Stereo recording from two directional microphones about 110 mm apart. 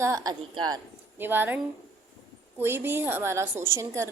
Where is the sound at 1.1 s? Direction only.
20° right (ahead or behind).